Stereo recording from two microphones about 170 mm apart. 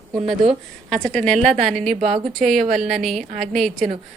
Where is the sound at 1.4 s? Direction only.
45° right (ahead or behind).